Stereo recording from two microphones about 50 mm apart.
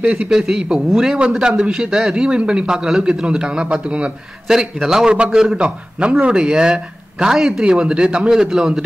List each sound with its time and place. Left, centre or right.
0.0 s a man's voice: centre
5.6 s a man's voice: centre